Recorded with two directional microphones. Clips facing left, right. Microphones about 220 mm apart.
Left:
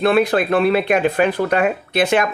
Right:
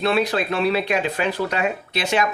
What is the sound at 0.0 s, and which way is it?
Speech, 55° left (ahead or behind).